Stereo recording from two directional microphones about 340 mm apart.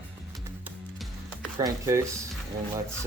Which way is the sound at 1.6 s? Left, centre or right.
Centre.